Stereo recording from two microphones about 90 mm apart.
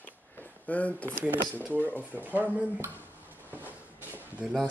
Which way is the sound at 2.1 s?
20° right (ahead or behind).